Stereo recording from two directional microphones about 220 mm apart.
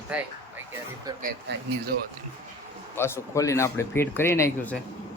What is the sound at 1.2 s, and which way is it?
Speech, 45° right (ahead or behind).